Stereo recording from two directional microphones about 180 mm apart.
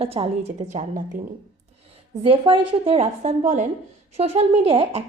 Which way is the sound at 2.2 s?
30° right (ahead or behind).